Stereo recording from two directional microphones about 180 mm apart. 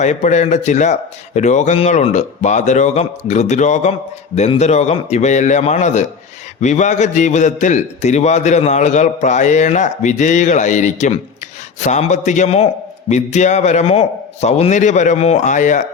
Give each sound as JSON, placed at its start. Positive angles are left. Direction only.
{"t": 0.0, "sound": "a man's voice", "side_deg": 40}